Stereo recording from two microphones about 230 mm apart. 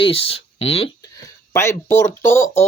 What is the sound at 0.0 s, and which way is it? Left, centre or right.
Speech, left.